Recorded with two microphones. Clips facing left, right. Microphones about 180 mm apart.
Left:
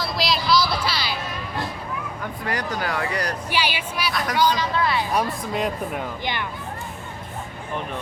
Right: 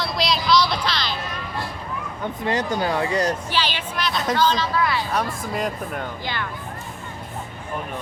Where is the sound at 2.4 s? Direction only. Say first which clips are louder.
Right 4 dB; 25° right (ahead or behind).